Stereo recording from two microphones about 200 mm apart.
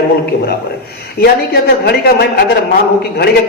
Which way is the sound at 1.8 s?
55° left (ahead or behind).